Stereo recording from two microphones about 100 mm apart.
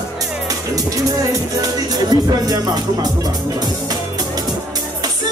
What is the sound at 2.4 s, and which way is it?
Music, 40° right (ahead or behind).